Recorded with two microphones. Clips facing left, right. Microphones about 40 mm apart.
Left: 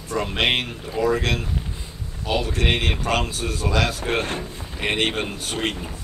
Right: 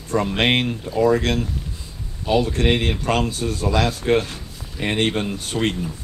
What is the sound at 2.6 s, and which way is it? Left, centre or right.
A man's voice, left.